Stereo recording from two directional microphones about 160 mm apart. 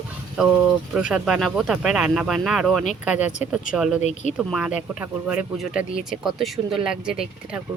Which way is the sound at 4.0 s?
45° left (ahead or behind).